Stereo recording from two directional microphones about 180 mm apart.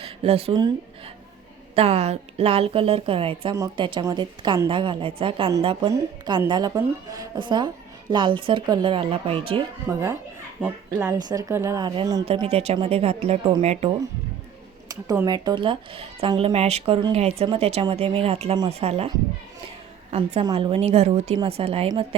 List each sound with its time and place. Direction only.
0.0 s speech: 35° right (ahead or behind)
1.7 s speech: 35° right (ahead or behind)
9.9 s speech: 15° right (ahead or behind)
12.2 s speech: 30° right (ahead or behind)
14.8 s a woman's voice: 20° right (ahead or behind)